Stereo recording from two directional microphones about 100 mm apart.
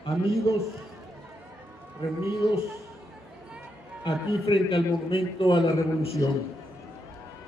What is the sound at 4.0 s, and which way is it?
A man's voice, 50° left (ahead or behind).